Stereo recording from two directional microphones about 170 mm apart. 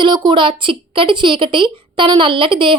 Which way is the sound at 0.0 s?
25° right (ahead or behind).